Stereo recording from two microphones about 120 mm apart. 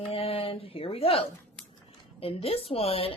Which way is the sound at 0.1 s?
50° left (ahead or behind).